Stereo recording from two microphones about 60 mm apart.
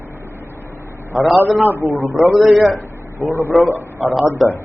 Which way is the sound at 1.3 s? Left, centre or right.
Right.